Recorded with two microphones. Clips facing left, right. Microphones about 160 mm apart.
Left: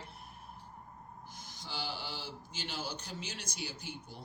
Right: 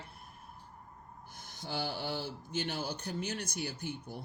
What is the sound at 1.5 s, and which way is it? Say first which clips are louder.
Speech: right 5 dB; 55° right (ahead or behind).